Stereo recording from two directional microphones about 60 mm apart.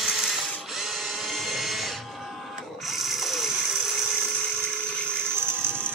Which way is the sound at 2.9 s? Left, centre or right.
Centre.